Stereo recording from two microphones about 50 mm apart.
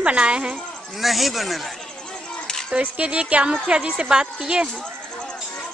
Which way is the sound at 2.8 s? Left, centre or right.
Right.